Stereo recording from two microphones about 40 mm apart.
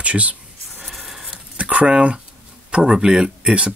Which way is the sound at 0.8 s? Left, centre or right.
Centre.